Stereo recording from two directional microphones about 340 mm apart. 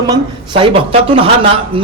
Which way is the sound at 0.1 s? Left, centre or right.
Centre.